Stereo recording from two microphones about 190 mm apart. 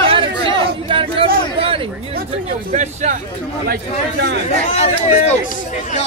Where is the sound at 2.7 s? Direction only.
40° right (ahead or behind).